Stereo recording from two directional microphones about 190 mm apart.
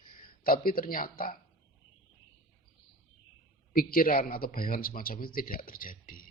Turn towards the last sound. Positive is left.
turn(degrees=45)  # may be behind; listen again after turning